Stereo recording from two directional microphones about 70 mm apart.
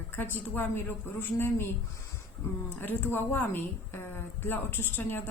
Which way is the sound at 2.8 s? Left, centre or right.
Left.